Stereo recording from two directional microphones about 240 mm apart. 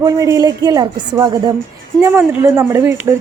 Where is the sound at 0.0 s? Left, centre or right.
Centre.